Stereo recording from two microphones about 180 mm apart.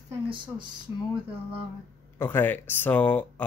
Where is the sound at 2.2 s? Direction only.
10° left (ahead or behind).